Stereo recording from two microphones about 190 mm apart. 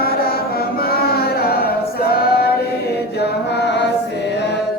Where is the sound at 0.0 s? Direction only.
55° left (ahead or behind).